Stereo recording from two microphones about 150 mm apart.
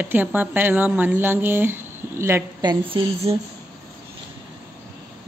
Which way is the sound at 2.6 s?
30° right (ahead or behind).